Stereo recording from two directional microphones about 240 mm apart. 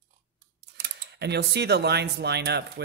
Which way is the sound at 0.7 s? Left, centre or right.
Right.